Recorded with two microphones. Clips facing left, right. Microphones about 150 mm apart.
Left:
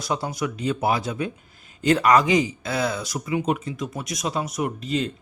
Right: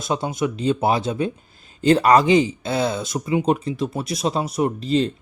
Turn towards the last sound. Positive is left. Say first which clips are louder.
# right 5 dB
turn(degrees=-30)  # may be behind; listen again after turning